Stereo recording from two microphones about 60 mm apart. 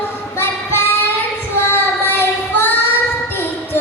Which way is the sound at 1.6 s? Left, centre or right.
Left.